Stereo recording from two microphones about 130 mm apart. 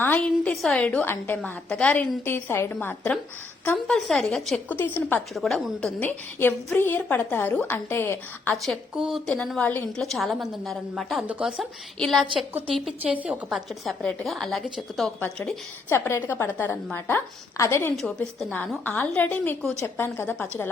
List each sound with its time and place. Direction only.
0.0 s a woman's voice: 15° left (ahead or behind)
3.8 s a woman's voice: centre (ahead or behind)
4.7 s a woman's voice: 15° left (ahead or behind)
5.3 s a woman's voice: centre (ahead or behind)
6.0 s a woman's voice: 15° left (ahead or behind)
8.5 s a woman's voice: centre (ahead or behind)
10.0 s a woman's voice: centre (ahead or behind)
13.0 s a woman's voice: 10° right (ahead or behind); by 17.9 s 20° left (ahead or behind)
17.9 s a woman's voice: 5° left (ahead or behind)